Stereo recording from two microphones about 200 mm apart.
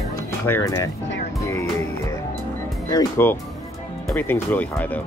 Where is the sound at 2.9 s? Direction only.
10° left (ahead or behind).